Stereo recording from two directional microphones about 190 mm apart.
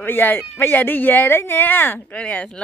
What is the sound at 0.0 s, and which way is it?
Speech, 10° left (ahead or behind).